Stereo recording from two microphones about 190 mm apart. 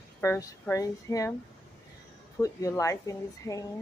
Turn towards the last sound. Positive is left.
turn(degrees=15)  # may be behind; listen again after turning